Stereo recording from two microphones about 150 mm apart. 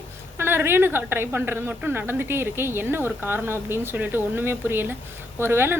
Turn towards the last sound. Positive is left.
turn(degrees=-15)  # may be behind; listen again after turning